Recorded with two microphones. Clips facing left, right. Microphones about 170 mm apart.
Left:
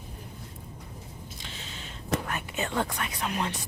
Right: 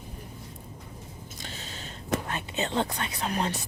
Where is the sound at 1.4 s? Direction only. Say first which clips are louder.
Right 6 dB; 40° right (ahead or behind).